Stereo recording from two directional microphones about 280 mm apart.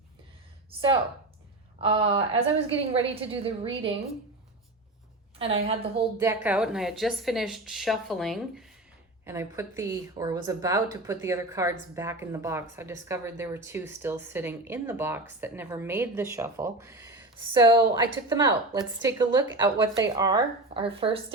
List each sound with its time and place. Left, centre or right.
1.8 s a woman's voice: centre
5.4 s a woman's voice: centre
6.1 s speech: centre